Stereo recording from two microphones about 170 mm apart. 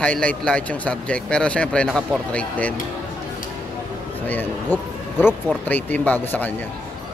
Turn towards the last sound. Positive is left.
turn(degrees=10)  # may be behind; listen again after turning